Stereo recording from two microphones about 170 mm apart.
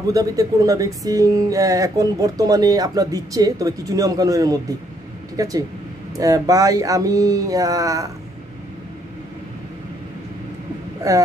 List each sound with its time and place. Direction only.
0.0 s speech: 20° right (ahead or behind)
11.0 s speech: 20° right (ahead or behind)